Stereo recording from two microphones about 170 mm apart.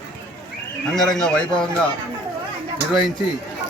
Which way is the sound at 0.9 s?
5° left (ahead or behind).